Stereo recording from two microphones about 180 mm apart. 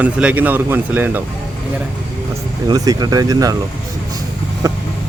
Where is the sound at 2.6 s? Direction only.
20° right (ahead or behind).